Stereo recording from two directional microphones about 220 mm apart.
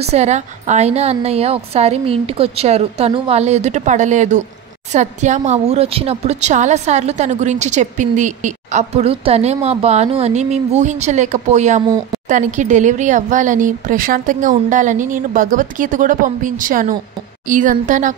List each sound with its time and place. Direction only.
0.1 s a woman's voice: 30° right (ahead or behind)